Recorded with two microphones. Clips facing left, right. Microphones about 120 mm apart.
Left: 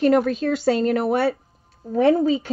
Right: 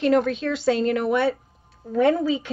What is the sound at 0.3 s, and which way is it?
Speech, 40° left (ahead or behind).